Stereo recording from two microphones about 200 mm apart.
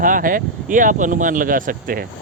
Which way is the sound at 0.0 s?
45° right (ahead or behind).